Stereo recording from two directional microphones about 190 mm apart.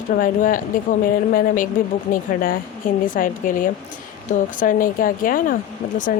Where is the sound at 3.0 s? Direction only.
45° left (ahead or behind).